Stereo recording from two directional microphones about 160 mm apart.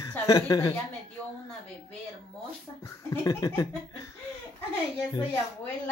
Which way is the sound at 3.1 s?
20° left (ahead or behind).